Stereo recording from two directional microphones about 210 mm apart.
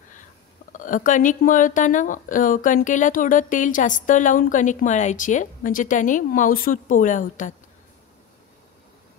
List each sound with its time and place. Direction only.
0.7 s speech: 40° left (ahead or behind)